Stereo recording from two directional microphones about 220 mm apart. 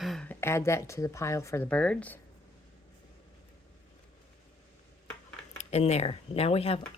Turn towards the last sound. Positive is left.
turn(degrees=25)  # may be behind; listen again after turning